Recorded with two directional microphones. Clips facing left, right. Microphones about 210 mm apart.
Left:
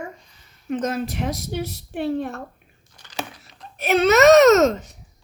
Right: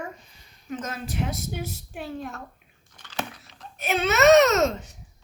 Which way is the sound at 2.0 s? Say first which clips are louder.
Left 10 dB; 70° left (ahead or behind).